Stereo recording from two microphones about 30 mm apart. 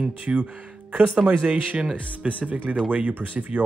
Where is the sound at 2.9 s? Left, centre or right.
Right.